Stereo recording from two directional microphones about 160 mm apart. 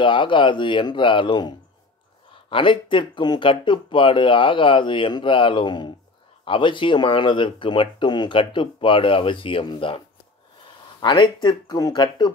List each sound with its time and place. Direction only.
0.0 s speech: 30° left (ahead or behind)
2.5 s speech: 30° left (ahead or behind)